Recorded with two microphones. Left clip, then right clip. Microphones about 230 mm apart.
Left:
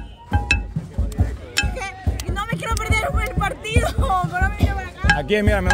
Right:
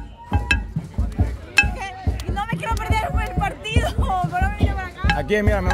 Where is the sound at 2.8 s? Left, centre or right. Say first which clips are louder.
Left 2 dB; centre.